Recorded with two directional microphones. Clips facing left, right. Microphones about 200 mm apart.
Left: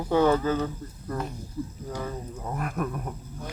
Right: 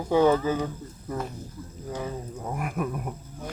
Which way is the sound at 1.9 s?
10° right (ahead or behind).